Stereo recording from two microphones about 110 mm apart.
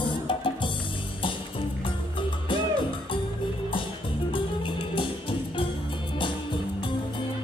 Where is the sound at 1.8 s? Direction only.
50° left (ahead or behind).